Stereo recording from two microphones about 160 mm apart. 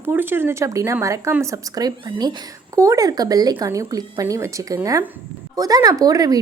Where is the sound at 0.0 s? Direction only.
15° right (ahead or behind).